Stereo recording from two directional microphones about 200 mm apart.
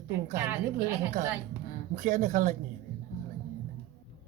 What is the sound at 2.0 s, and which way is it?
Speech, 40° right (ahead or behind).